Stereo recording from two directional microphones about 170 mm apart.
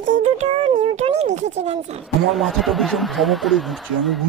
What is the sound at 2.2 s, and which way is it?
Speech, centre (ahead or behind).